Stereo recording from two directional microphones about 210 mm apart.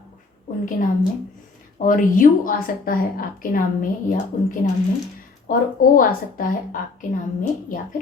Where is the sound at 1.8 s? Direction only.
40° left (ahead or behind).